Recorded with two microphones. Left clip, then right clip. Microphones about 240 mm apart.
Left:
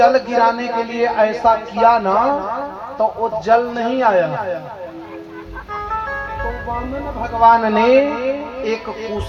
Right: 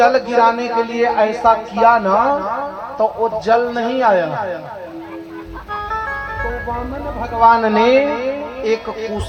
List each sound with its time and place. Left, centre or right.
0.0 s speech: right
7.2 s speech: right